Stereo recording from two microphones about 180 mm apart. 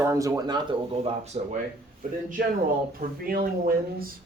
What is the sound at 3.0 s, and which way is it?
Speech, 55° right (ahead or behind).